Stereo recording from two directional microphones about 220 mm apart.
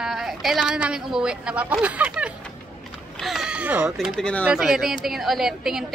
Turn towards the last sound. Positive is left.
turn(degrees=0)  # may be behind; listen again after turning